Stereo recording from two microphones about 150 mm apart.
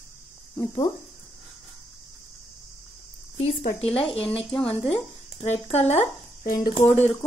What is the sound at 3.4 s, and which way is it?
Speech, 40° left (ahead or behind).